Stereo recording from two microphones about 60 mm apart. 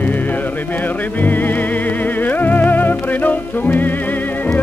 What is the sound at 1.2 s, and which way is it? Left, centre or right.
Music, left.